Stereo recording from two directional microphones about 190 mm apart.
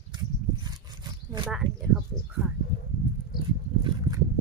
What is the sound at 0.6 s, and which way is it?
Rub, 20° right (ahead or behind).